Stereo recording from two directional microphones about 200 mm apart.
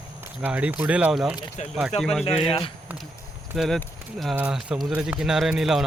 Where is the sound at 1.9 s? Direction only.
35° left (ahead or behind).